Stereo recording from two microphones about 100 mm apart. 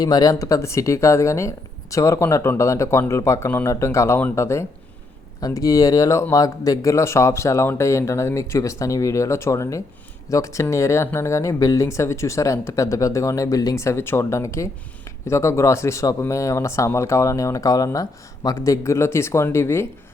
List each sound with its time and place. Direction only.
0.0 s speech: 40° left (ahead or behind)